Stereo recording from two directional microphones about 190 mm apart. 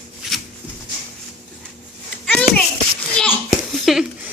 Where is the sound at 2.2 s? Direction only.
5° left (ahead or behind).